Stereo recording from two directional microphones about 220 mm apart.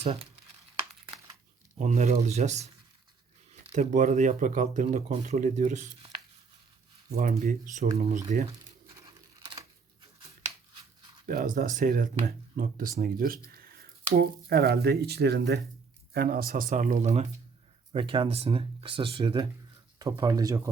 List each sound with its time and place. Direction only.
0.0 s speech: 25° right (ahead or behind)
1.8 s speech: 30° right (ahead or behind)
7.2 s speech: 35° right (ahead or behind)
11.3 s speech: 35° right (ahead or behind); by 20.6 s 15° right (ahead or behind)